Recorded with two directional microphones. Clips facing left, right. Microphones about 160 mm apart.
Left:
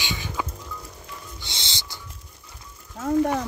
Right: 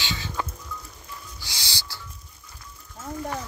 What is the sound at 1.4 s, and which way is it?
Owl, 25° left (ahead or behind).